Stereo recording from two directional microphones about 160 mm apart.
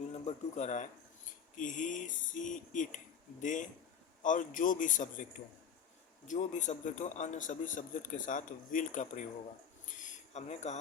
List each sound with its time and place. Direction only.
0.1 s a man's voice: 45° left (ahead or behind)
6.2 s a man's voice: 50° left (ahead or behind)
10.3 s a man's voice: 45° left (ahead or behind)